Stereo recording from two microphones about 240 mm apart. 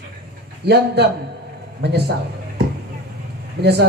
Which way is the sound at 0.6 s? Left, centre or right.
Right.